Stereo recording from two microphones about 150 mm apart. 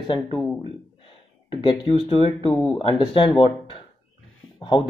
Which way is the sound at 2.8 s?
35° left (ahead or behind).